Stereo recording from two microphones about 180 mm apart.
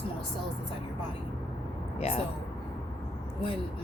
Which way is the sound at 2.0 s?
35° left (ahead or behind).